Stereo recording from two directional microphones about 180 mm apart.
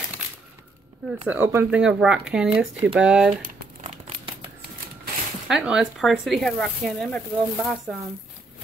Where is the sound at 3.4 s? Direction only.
50° right (ahead or behind).